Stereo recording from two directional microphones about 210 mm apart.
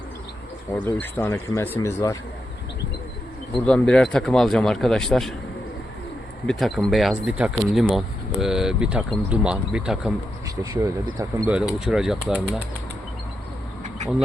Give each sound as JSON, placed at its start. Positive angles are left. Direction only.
{"t": 0.9, "sound": "speech", "side_deg": 10}
{"t": 3.6, "sound": "speech", "side_deg": 5}
{"t": 6.5, "sound": "speech", "side_deg": 0}
{"t": 10.4, "sound": "speech", "side_deg": -15}
{"t": 11.5, "sound": "speech", "side_deg": 0}